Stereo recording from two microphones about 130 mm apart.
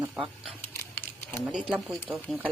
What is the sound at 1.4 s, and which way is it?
Speech, 5° right (ahead or behind).